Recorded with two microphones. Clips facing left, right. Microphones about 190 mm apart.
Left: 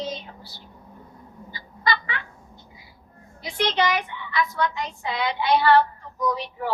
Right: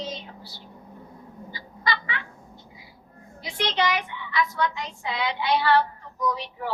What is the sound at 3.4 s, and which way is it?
Speech, 50° left (ahead or behind).